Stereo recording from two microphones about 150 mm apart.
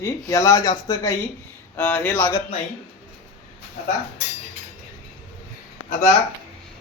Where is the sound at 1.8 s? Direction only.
10° left (ahead or behind).